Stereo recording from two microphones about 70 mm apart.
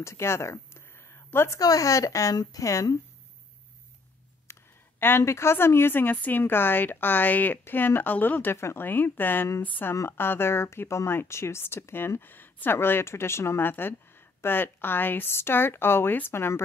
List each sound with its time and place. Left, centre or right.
0.0 s a woman's voice: left
1.6 s speech: left
4.5 s a sound: left
5.0 s a woman's voice: left